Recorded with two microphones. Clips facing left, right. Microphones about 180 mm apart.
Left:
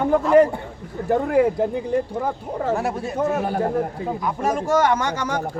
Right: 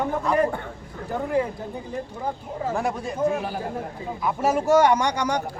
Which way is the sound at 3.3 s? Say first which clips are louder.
Left 5 dB; 50° left (ahead or behind).